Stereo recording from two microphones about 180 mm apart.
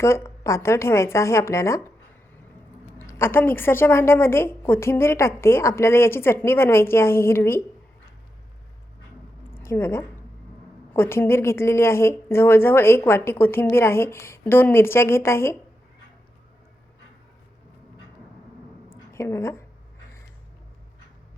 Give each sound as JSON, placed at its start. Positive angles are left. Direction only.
{"t": 0.0, "sound": "a woman's voice", "side_deg": 15}
{"t": 3.1, "sound": "a woman's voice", "side_deg": 15}
{"t": 9.5, "sound": "a woman's voice", "side_deg": 15}
{"t": 18.9, "sound": "a sound", "side_deg": 15}